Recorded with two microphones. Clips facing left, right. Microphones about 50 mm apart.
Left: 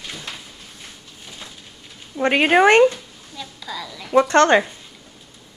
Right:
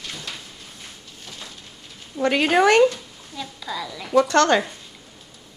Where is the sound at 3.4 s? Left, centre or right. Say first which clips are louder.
Right 2 dB; centre.